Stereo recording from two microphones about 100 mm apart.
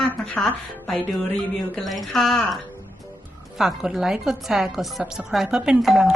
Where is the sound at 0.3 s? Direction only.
5° left (ahead or behind).